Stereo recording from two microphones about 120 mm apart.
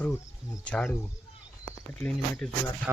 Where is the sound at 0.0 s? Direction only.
20° left (ahead or behind).